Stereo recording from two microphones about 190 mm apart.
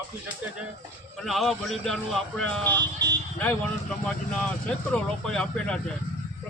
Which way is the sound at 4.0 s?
5° left (ahead or behind).